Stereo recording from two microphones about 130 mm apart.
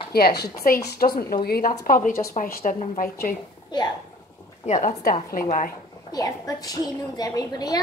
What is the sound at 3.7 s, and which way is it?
Speech, 35° left (ahead or behind).